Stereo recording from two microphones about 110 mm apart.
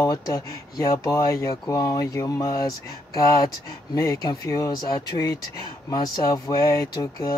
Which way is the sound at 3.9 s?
30° left (ahead or behind).